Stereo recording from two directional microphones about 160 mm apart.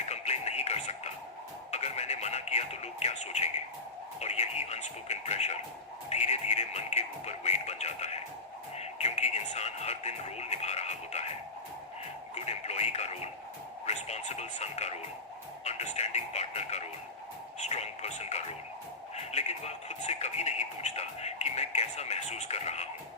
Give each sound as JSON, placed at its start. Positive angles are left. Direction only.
{"t": 0.0, "sound": "music", "side_deg": 45}
{"t": 12.3, "sound": "radio", "side_deg": 40}
{"t": 15.6, "sound": "music", "side_deg": 45}
{"t": 17.6, "sound": "a sound", "side_deg": 45}